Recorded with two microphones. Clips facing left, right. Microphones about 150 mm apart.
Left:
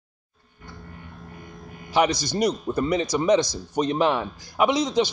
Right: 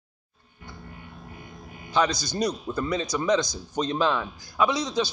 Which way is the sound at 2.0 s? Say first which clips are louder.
Left 3 dB; 20° left (ahead or behind).